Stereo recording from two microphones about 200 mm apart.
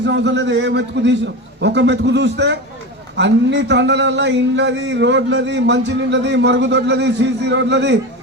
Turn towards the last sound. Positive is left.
turn(degrees=-60)  # may be behind; listen again after turning